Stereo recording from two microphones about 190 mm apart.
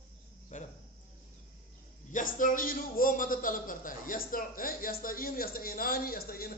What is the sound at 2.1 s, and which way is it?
A man's voice, 45° left (ahead or behind).